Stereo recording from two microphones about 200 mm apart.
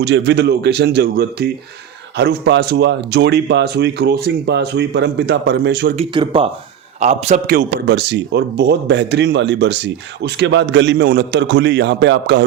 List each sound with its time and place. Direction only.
0.0 s speech: 60° right (ahead or behind)
6.0 s a man's voice: 25° right (ahead or behind)
7.4 s speech: 45° right (ahead or behind)